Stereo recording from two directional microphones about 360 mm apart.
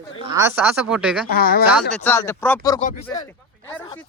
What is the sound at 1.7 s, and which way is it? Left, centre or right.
Speech, centre.